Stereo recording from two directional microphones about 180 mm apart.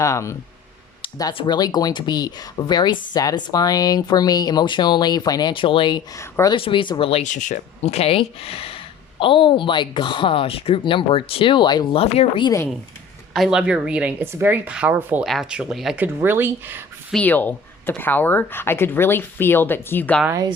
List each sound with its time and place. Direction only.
0.0 s speech: 15° left (ahead or behind)
1.0 s speech: 30° left (ahead or behind)
6.1 s speech: 20° left (ahead or behind)
6.6 s speech: 30° left (ahead or behind)
13.3 s a woman's voice: centre (ahead or behind)
17.1 s speech: 5° left (ahead or behind)
20.2 s a woman's voice: 15° right (ahead or behind)